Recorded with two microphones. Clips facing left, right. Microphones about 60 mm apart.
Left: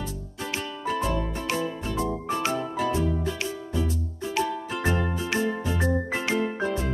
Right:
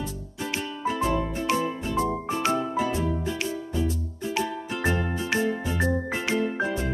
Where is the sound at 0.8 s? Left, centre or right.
Centre.